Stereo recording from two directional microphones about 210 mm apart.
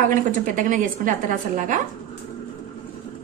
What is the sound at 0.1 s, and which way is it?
A woman's voice, 40° right (ahead or behind).